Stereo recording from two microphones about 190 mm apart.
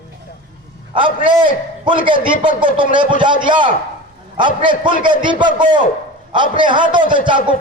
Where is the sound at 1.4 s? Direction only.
25° right (ahead or behind).